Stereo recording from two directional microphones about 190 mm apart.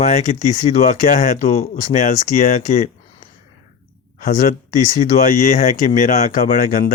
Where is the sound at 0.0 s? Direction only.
40° left (ahead or behind).